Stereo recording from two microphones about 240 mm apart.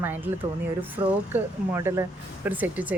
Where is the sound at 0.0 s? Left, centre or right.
Centre.